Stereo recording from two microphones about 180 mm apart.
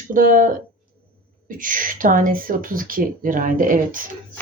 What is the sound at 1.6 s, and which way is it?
Speech, 50° right (ahead or behind).